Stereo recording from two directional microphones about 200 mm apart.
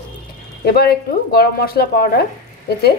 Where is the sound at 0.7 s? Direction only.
50° left (ahead or behind).